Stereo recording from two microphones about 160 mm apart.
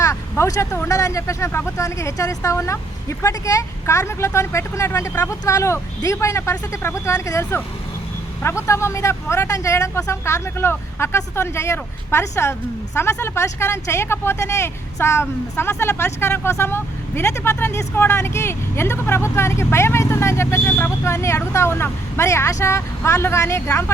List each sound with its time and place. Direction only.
0.0 s speech: 20° left (ahead or behind)